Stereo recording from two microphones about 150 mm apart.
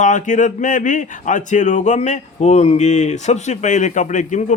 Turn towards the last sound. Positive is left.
turn(degrees=55)  # may be behind; listen again after turning